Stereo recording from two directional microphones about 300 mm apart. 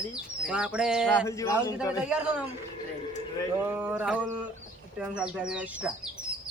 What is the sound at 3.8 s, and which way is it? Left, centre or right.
Speech, centre.